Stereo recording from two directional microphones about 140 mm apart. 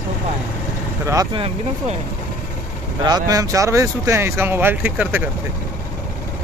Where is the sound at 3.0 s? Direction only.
30° right (ahead or behind).